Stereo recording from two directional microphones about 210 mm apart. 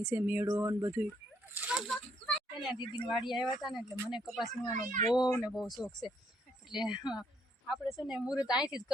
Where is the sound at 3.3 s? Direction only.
Centre (ahead or behind).